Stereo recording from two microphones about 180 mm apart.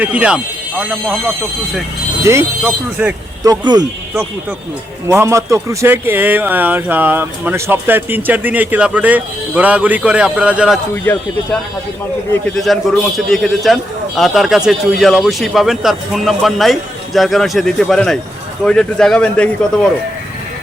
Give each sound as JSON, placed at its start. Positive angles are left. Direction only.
{"t": 0.0, "sound": "speech", "side_deg": -5}
{"t": 2.2, "sound": "speech", "side_deg": -15}
{"t": 5.0, "sound": "speech", "side_deg": -15}
{"t": 11.1, "sound": "speech", "side_deg": 10}
{"t": 12.5, "sound": "speech", "side_deg": 0}